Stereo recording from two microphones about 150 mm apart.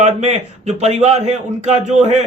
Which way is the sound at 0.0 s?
50° right (ahead or behind).